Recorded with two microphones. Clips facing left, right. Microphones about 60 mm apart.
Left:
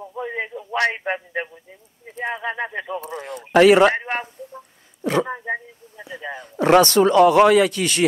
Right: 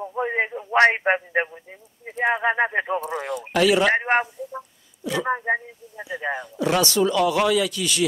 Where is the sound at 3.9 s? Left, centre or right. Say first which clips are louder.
Right 6 dB; right.